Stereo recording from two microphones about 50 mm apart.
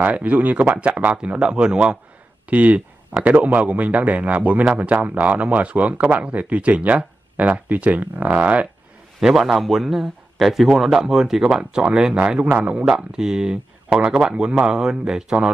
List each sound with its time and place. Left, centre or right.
0.0 s a man's voice: right
2.5 s a man's voice: right
9.2 s a man's voice: centre; by 12.8 s right
12.8 s a man's voice: centre